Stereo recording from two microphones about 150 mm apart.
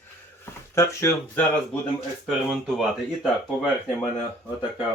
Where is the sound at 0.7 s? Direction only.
20° left (ahead or behind).